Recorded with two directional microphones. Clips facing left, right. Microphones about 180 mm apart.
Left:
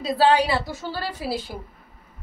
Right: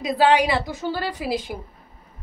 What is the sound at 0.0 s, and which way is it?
A woman's voice, 15° right (ahead or behind).